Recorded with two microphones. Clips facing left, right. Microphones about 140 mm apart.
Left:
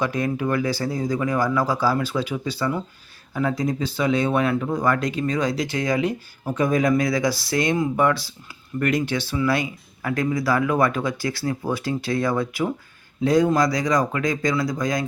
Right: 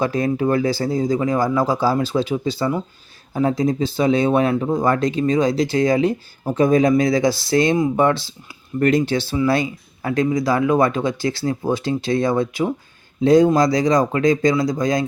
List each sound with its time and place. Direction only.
0.0 s speech: 30° right (ahead or behind)